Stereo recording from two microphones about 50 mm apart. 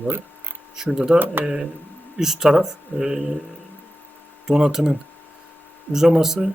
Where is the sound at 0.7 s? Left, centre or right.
Centre.